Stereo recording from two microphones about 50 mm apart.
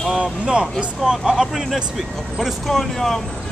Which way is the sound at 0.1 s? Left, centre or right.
Centre.